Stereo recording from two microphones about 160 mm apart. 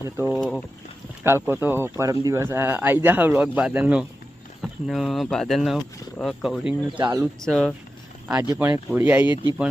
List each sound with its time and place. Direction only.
0.3 s speech: centre (ahead or behind)
1.2 s speech: 15° right (ahead or behind)
6.9 s speech: 20° right (ahead or behind)
7.4 s speech: 5° left (ahead or behind)
8.3 s speech: 15° right (ahead or behind)